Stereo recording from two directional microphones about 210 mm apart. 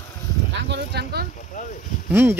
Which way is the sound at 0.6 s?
55° right (ahead or behind).